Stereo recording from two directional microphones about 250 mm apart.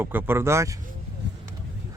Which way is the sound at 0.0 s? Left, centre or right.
Centre.